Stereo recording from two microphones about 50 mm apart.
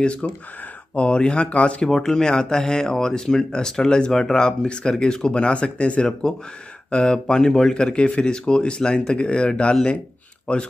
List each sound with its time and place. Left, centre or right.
0.0 s speech: left
1.9 s speech: centre